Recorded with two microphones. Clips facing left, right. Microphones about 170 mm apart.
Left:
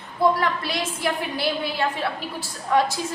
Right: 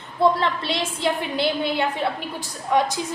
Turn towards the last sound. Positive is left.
turn(degrees=-20)  # may be behind; listen again after turning